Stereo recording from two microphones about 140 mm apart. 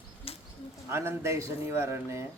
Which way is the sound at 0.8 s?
20° right (ahead or behind).